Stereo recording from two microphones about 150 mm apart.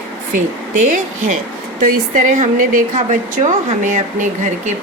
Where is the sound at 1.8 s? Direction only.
60° right (ahead or behind).